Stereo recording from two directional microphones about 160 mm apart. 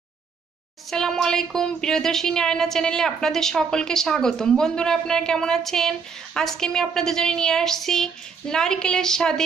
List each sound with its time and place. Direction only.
0.8 s speech: 5° left (ahead or behind)